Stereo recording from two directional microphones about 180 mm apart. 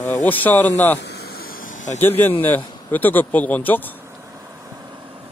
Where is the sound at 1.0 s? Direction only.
65° left (ahead or behind); by 2.0 s 45° left (ahead or behind).